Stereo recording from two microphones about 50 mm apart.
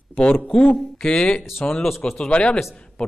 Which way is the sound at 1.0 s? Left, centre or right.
Centre.